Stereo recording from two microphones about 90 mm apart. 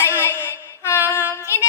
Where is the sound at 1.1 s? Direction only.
30° left (ahead or behind).